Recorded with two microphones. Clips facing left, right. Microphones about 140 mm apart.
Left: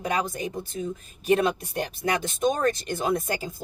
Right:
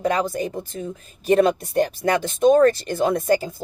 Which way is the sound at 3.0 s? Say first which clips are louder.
Right 10 dB; 45° right (ahead or behind).